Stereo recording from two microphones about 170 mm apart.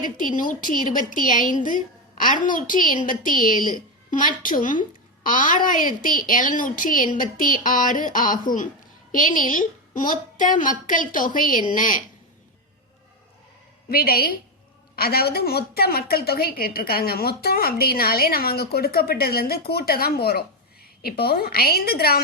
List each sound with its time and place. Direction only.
0.0 s a woman's voice: 50° left (ahead or behind)
13.9 s a woman's voice: 60° left (ahead or behind)